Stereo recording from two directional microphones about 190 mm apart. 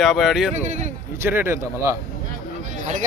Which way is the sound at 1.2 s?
10° right (ahead or behind).